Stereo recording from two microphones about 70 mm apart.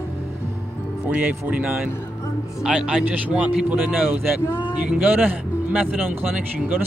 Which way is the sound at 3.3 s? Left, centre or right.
Right.